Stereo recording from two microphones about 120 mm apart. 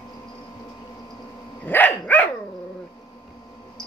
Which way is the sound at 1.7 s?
15° left (ahead or behind).